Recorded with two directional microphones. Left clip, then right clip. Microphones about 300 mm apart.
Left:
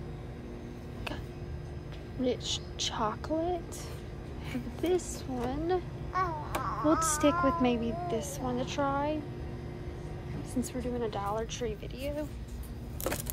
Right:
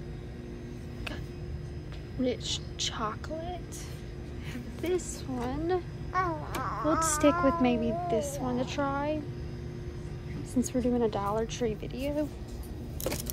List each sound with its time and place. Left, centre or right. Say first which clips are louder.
2.2 s a woman's voice: even; centre
6.1 s babbling: right 1 dB; right
6.9 s a woman's voice: right 2 dB; centre
10.7 s speech: right 7 dB; centre